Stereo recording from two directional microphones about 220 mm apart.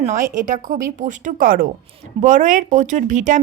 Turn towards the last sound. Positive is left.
turn(degrees=-35)  # may be behind; listen again after turning